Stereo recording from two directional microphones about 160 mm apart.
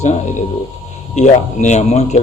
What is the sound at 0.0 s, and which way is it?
A man's voice, 45° left (ahead or behind).